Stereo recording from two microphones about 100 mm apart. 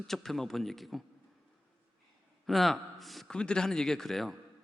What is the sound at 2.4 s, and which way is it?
Speech, centre (ahead or behind).